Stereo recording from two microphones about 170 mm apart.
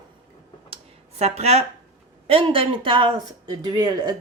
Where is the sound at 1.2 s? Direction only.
40° right (ahead or behind).